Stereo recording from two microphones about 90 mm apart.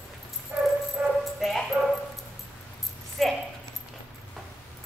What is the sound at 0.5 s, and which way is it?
Dog, 20° right (ahead or behind).